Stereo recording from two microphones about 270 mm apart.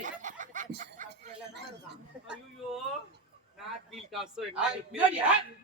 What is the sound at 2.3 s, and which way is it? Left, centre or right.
A man's voice, centre.